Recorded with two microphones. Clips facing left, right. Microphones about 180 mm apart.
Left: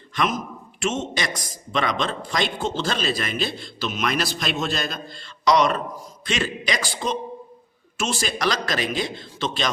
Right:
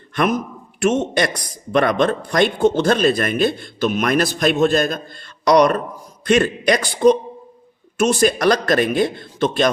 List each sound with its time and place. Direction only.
0.1 s a man's voice: 60° right (ahead or behind)